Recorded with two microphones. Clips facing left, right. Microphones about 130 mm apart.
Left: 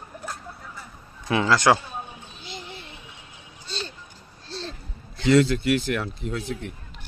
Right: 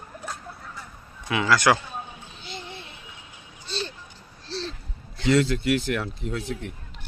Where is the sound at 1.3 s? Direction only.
30° left (ahead or behind).